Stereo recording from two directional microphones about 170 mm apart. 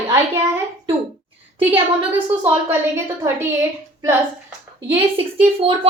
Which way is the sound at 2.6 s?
15° right (ahead or behind).